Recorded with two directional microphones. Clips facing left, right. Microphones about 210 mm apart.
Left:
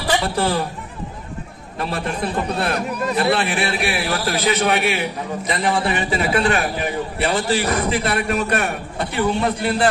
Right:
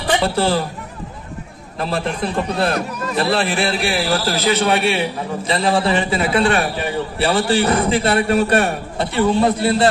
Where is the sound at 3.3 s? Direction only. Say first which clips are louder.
Right 2 dB; 30° right (ahead or behind).